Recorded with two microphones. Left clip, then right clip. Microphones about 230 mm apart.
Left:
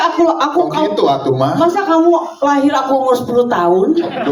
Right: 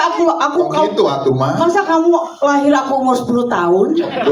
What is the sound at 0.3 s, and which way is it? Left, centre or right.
A woman's voice, left.